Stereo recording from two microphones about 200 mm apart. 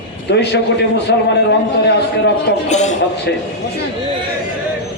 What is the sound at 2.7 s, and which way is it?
Speech, 35° left (ahead or behind).